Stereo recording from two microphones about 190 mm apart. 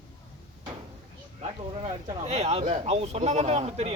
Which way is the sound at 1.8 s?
35° right (ahead or behind).